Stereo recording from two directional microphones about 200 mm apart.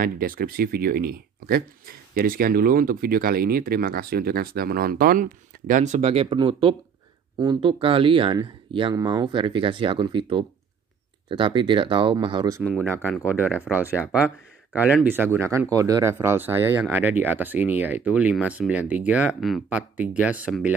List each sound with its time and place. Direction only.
0.0 s speech: 45° right (ahead or behind); by 12.6 s 20° right (ahead or behind)
12.6 s speech: 5° left (ahead or behind)
13.7 s speech: 10° right (ahead or behind)